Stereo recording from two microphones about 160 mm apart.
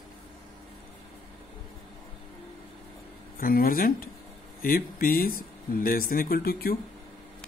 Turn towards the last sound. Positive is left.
turn(degrees=70)  # may be behind; listen again after turning